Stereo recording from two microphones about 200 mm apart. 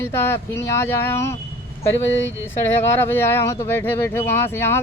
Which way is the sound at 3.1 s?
10° left (ahead or behind).